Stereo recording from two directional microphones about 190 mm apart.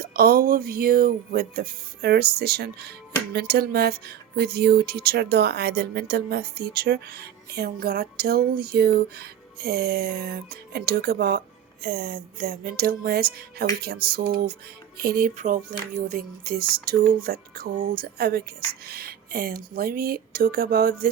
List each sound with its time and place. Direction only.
0.0 s music: 55° right (ahead or behind)
3.3 s speech: 55° right (ahead or behind)
14.9 s music: 50° right (ahead or behind)